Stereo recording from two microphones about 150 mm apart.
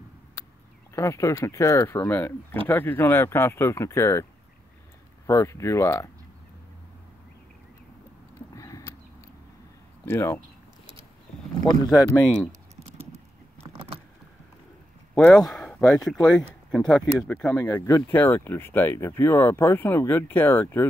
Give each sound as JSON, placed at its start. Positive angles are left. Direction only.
{"t": 0.9, "sound": "speech", "side_deg": 20}
{"t": 8.5, "sound": "horse", "side_deg": 20}
{"t": 10.0, "sound": "speech", "side_deg": 15}
{"t": 11.7, "sound": "speech", "side_deg": 25}
{"t": 15.1, "sound": "speech", "side_deg": 5}
{"t": 17.6, "sound": "speech", "side_deg": 20}